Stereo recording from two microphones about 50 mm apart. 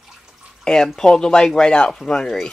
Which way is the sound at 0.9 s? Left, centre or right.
Centre.